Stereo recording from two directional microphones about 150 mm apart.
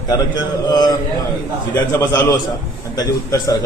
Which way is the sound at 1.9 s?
20° left (ahead or behind).